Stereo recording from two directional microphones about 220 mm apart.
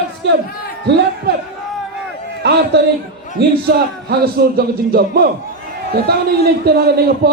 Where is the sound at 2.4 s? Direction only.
50° right (ahead or behind).